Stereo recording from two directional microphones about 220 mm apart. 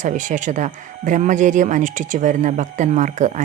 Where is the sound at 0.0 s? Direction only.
35° right (ahead or behind).